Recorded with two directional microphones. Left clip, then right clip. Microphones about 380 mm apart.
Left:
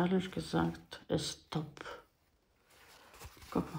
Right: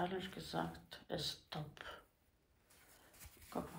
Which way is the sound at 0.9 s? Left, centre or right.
Centre.